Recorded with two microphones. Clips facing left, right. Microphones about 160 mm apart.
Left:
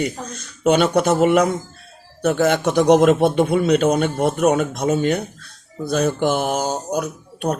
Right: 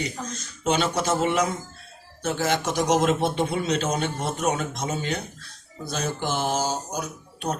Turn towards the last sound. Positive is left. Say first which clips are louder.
# left 7 dB
turn(degrees=55)  # may be behind; listen again after turning